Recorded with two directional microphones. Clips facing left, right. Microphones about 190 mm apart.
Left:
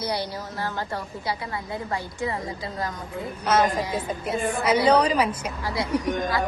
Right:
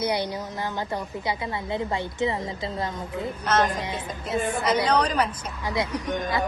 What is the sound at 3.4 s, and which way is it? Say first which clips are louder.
A woman's voice: left 3 dB; 10° left (ahead or behind).